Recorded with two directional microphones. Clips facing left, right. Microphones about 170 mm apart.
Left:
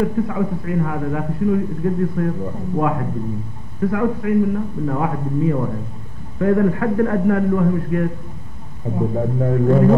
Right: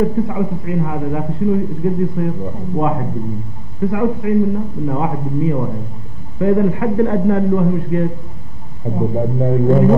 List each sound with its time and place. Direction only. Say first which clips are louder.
0.0 s a man's voice: right 2 dB; 25° right (ahead or behind)